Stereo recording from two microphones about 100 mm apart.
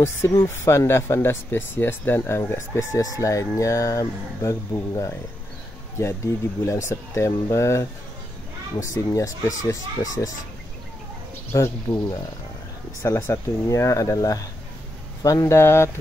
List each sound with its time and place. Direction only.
0.0 s speech: 30° left (ahead or behind)
5.9 s speech: 25° left (ahead or behind)
11.5 s speech: 30° left (ahead or behind)